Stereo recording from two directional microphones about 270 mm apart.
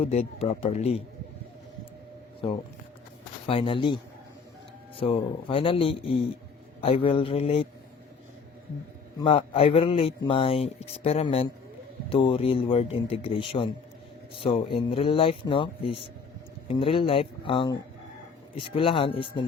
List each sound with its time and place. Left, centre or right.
0.0 s speech: left
3.4 s speech: centre
9.1 s speech: centre